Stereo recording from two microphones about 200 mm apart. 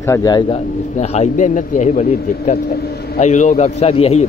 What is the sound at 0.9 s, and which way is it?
A man's voice, 35° left (ahead or behind).